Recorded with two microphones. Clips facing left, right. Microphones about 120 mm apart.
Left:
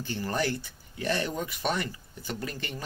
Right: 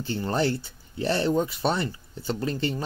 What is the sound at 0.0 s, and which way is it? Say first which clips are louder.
Speech: right 4 dB; 25° right (ahead or behind).